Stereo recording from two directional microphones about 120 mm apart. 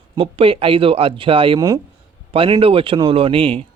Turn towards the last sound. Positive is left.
turn(degrees=-50)  # may be behind; listen again after turning